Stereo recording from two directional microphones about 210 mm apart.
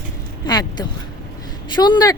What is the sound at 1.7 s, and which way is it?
Speech, 20° left (ahead or behind).